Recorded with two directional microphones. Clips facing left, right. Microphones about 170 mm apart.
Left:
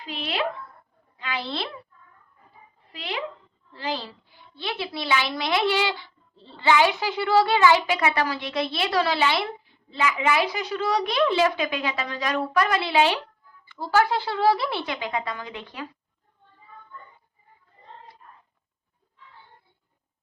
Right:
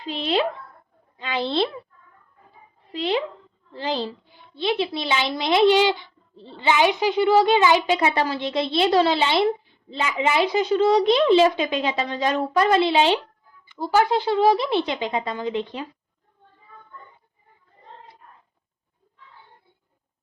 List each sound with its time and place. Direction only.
0.0 s a child's voice: 25° right (ahead or behind)
2.9 s a child's voice: 30° right (ahead or behind)